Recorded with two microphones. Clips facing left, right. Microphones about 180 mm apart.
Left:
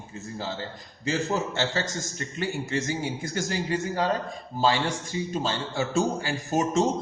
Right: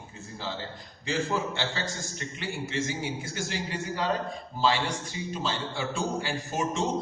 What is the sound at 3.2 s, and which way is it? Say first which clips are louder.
Speech: left 5 dB; 45° left (ahead or behind).